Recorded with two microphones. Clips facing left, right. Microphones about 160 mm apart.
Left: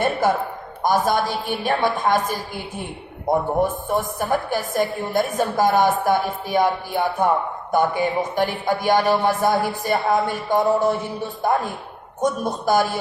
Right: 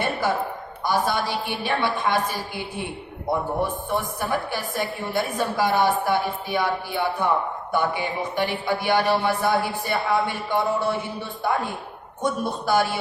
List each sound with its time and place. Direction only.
0.0 s a man's voice: 45° left (ahead or behind)
3.6 s a man's voice: 45° left (ahead or behind)